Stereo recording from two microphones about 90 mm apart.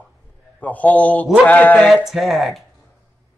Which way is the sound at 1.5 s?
20° left (ahead or behind).